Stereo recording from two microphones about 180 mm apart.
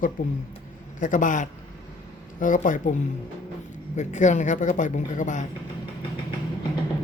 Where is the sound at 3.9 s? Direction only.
40° left (ahead or behind).